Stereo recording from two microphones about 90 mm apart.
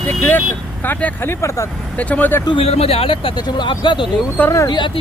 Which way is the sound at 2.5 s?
90° left.